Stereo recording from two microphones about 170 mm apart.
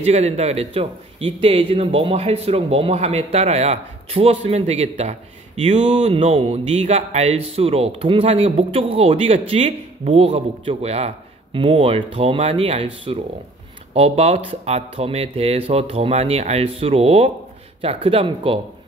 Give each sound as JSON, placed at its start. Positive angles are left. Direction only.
{"t": 0.0, "sound": "speech", "side_deg": -40}